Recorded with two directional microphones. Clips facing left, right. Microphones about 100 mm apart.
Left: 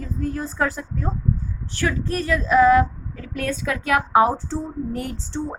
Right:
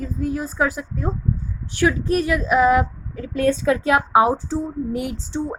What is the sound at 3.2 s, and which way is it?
A woman's voice, 30° right (ahead or behind).